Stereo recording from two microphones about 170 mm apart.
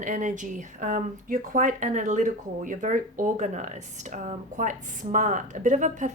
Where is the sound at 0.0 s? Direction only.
45° right (ahead or behind).